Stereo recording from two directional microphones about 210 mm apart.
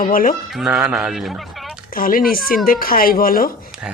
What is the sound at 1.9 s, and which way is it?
Speech, 45° left (ahead or behind).